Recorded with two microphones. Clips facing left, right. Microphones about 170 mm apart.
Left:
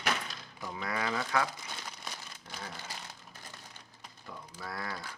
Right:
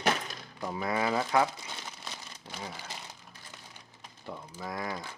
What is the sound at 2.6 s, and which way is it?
Speech, 10° right (ahead or behind).